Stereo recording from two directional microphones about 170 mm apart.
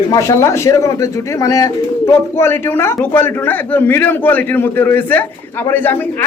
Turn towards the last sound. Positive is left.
turn(degrees=10)  # may be behind; listen again after turning